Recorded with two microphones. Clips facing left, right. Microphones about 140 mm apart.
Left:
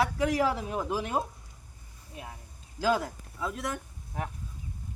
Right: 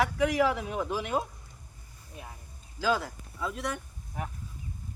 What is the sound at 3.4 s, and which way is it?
Speech, centre (ahead or behind).